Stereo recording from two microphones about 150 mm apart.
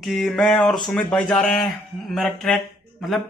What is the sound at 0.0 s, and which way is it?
A man's voice, centre (ahead or behind).